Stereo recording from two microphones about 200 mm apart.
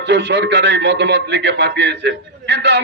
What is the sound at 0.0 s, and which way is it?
A man's voice, 60° right (ahead or behind).